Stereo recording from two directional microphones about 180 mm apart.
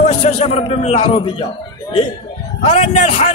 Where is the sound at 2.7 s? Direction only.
35° left (ahead or behind).